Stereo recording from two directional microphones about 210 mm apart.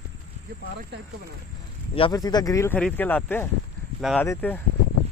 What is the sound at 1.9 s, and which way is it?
Speech, 20° left (ahead or behind).